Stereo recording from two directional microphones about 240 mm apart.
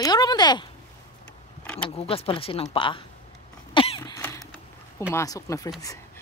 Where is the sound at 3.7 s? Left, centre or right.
Left.